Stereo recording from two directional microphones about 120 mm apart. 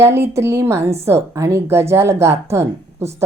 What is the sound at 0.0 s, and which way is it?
Speech, 20° right (ahead or behind).